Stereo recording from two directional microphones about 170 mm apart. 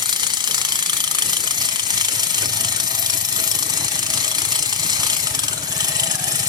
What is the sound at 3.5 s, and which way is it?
Ratchet, 25° right (ahead or behind).